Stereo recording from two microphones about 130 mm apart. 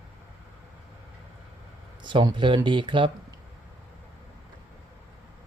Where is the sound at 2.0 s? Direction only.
35° right (ahead or behind).